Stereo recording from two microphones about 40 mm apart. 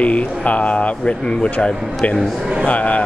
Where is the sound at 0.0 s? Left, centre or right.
Left.